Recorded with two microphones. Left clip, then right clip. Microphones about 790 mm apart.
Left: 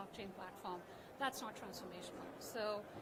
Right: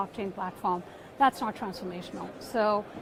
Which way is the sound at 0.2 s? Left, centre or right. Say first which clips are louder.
Right 15 dB; right.